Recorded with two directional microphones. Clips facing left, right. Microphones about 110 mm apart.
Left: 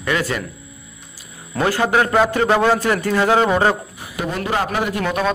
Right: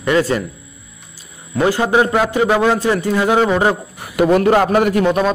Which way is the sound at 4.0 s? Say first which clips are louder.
Right 11 dB; 70° right (ahead or behind).